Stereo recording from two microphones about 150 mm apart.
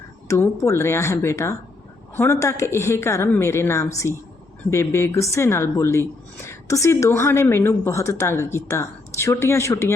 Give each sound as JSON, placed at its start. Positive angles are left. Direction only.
{"t": 0.3, "sound": "a woman's voice", "side_deg": 20}